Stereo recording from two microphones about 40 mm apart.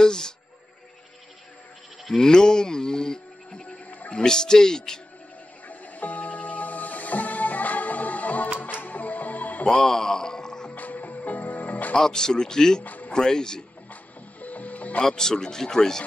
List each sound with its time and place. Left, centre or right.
0.0 s a sound: centre
2.0 s speech: centre
3.7 s music: left
4.1 s speech: centre
5.7 s music: left
9.7 s a sound: centre
10.7 s music: left
11.9 s speech: centre
12.8 s music: left
13.1 s speech: centre
14.4 s music: left
15.0 s speech: centre